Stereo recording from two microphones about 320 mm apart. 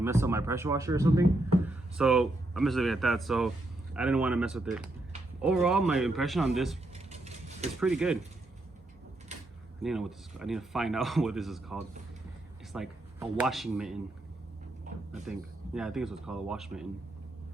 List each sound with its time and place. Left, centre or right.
0.0 s speech: centre
6.9 s mechanisms: right
7.8 s speech: centre
9.8 s speech: centre
15.3 s speech: centre